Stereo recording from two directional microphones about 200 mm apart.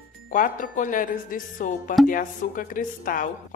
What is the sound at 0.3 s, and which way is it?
A woman's voice, 40° left (ahead or behind).